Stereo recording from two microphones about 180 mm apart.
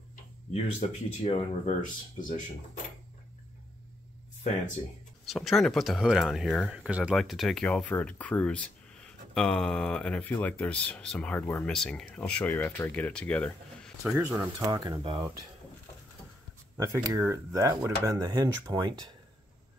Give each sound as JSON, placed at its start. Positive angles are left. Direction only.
{"t": 0.5, "sound": "speech", "side_deg": 35}
{"t": 2.1, "sound": "speech", "side_deg": 50}
{"t": 4.4, "sound": "speech", "side_deg": 40}
{"t": 5.2, "sound": "speech", "side_deg": 0}
{"t": 14.0, "sound": "speech", "side_deg": -10}
{"t": 16.7, "sound": "speech", "side_deg": -15}